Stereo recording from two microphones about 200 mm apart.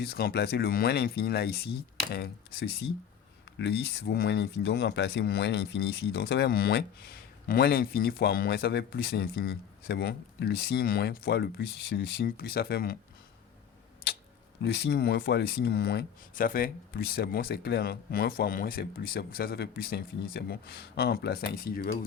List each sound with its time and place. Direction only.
0.0 s speech: 50° left (ahead or behind)
14.6 s speech: 60° left (ahead or behind)